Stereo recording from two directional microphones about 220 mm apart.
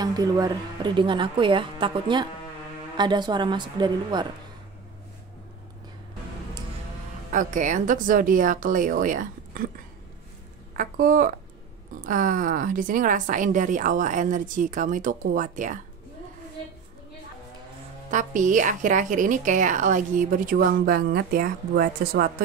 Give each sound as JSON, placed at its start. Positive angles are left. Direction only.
{"t": 0.0, "sound": "a woman's voice", "side_deg": -15}
{"t": 7.3, "sound": "a woman's voice", "side_deg": -35}
{"t": 10.8, "sound": "a woman's voice", "side_deg": -40}
{"t": 18.1, "sound": "a woman's voice", "side_deg": -35}